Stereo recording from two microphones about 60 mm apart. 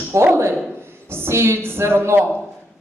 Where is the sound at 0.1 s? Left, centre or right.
Right.